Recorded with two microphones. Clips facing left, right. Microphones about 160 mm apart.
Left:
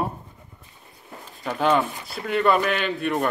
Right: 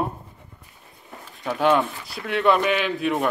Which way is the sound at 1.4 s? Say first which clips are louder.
Right 1 dB; centre (ahead or behind).